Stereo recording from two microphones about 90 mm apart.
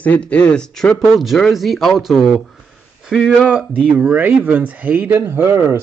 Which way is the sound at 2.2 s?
Centre (ahead or behind).